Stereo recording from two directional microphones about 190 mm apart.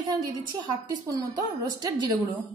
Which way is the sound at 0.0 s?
20° right (ahead or behind).